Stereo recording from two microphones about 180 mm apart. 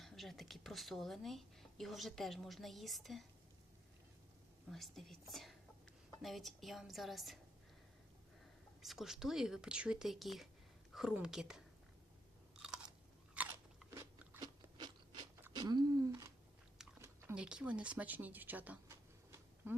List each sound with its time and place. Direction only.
0.0 s speech: centre (ahead or behind)
4.7 s speech: centre (ahead or behind)
8.8 s speech: centre (ahead or behind)
12.6 s chewing: 5° right (ahead or behind)
13.3 s crunch: 10° right (ahead or behind); by 15.2 s 25° right (ahead or behind)
15.4 s a sound: 15° right (ahead or behind)